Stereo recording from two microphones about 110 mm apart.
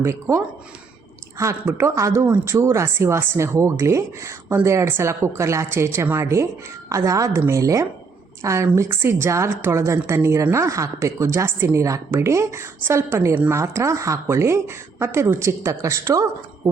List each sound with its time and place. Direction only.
0.0 s a woman's voice: 25° right (ahead or behind)
2.2 s speech: 15° right (ahead or behind)
2.5 s a woman's voice: 25° right (ahead or behind)